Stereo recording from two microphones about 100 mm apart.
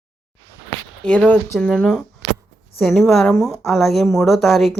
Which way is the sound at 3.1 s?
5° left (ahead or behind).